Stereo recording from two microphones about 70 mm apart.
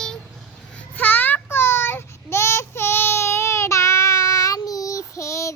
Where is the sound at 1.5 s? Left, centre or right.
Left.